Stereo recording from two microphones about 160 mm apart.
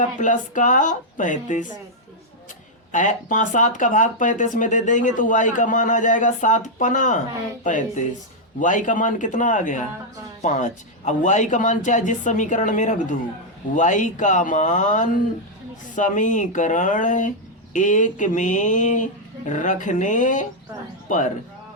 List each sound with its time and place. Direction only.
0.0 s speech: 50° left (ahead or behind)
2.9 s speech: 50° left (ahead or behind)